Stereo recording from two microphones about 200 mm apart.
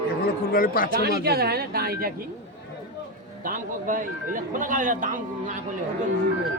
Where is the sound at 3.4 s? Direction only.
45° right (ahead or behind).